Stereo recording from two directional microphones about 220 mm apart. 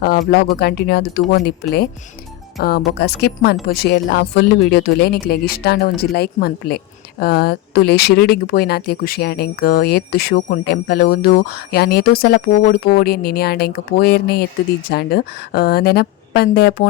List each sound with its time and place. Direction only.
0.0 s speech: 45° left (ahead or behind)
2.6 s speech: 45° left (ahead or behind)